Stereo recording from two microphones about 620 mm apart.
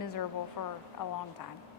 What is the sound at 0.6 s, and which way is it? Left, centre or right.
Speech, left.